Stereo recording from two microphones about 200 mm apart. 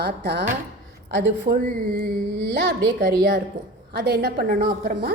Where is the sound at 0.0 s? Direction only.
55° right (ahead or behind).